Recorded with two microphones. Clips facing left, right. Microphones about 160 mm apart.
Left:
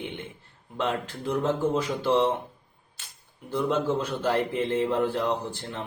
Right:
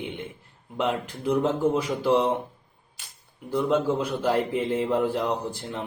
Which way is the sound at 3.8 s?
10° right (ahead or behind).